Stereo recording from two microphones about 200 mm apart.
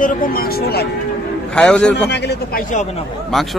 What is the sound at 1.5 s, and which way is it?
Speech, 5° left (ahead or behind).